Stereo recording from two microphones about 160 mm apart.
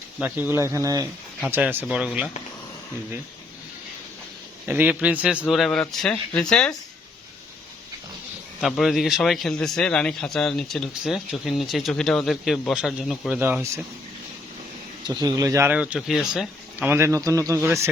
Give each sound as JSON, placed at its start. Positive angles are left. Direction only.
{"t": 0.2, "sound": "a man's voice", "side_deg": -10}
{"t": 4.6, "sound": "a man's voice", "side_deg": -10}
{"t": 8.6, "sound": "a man's voice", "side_deg": 0}
{"t": 15.0, "sound": "speech", "side_deg": -25}
{"t": 16.9, "sound": "speech", "side_deg": -15}